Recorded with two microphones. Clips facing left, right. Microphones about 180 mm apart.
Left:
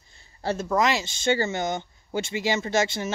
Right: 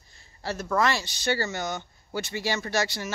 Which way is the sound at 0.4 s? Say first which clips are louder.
Left 2 dB; 25° left (ahead or behind).